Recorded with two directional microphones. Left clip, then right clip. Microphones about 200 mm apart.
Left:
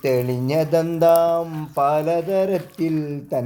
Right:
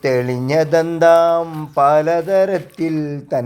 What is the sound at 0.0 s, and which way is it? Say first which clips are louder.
Speech: right 3 dB; 15° right (ahead or behind).